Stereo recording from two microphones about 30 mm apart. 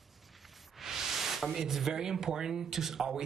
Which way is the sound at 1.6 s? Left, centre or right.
Centre.